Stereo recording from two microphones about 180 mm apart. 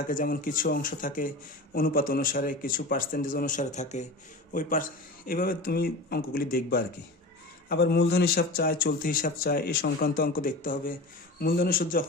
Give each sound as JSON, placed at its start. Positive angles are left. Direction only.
{"t": 0.1, "sound": "speech", "side_deg": 50}